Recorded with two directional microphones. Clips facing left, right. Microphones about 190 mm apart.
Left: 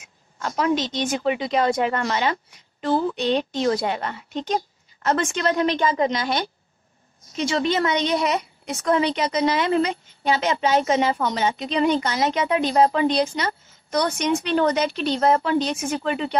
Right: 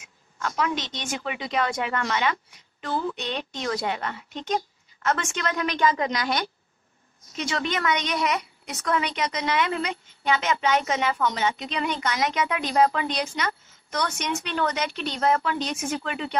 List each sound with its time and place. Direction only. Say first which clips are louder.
0.4 s a woman's voice: left 5 dB; 35° left (ahead or behind)